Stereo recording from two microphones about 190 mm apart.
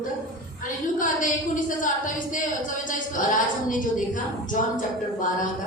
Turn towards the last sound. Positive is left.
turn(degrees=45)  # may be behind; listen again after turning